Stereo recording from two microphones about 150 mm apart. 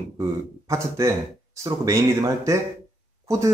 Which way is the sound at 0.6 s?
20° right (ahead or behind).